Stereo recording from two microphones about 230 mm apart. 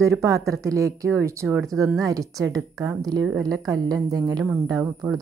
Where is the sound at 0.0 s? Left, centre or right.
Centre.